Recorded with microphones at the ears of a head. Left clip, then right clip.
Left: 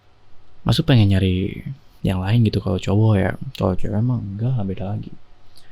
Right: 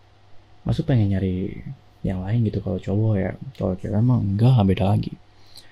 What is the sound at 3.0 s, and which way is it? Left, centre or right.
Speech, left.